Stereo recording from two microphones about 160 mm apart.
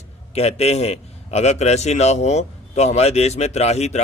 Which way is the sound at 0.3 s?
40° left (ahead or behind).